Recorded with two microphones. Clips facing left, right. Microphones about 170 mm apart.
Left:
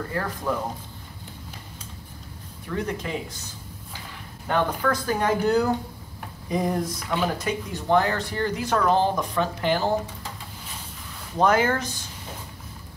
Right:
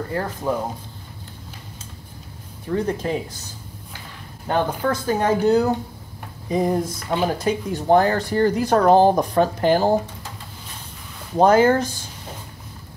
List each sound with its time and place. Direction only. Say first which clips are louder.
0.1 s speech: right 4 dB; 25° right (ahead or behind)
2.7 s speech: right 6 dB; 30° right (ahead or behind)
4.5 s speech: right 2 dB; 30° right (ahead or behind)
11.3 s speech: right 6 dB; 35° right (ahead or behind)